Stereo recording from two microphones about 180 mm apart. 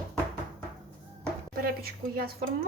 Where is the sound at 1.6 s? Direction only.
55° right (ahead or behind).